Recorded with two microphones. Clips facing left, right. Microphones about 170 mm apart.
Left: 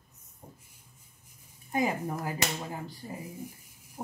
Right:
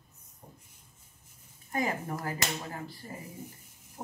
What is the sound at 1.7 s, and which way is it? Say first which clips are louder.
Speech: left 3 dB; 15° left (ahead or behind).